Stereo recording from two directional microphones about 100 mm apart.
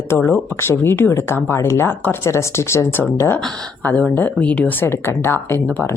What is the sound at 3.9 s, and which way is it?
Speech, 15° left (ahead or behind).